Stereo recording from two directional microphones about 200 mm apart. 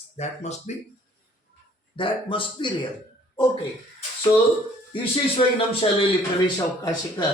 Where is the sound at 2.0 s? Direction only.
25° left (ahead or behind).